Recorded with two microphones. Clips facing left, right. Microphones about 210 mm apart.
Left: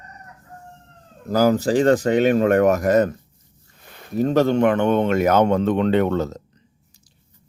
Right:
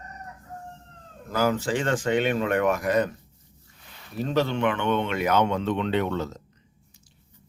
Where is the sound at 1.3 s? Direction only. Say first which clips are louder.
Left 7 dB; 40° left (ahead or behind).